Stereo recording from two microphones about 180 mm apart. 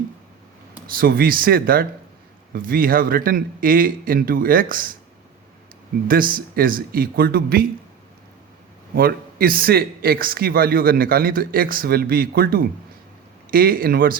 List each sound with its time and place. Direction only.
0.9 s a man's voice: 55° right (ahead or behind)
6.1 s a man's voice: 50° right (ahead or behind)
9.0 s a man's voice: 55° right (ahead or behind)